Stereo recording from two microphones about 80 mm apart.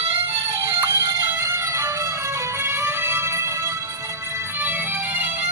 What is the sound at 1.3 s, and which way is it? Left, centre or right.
Music, right.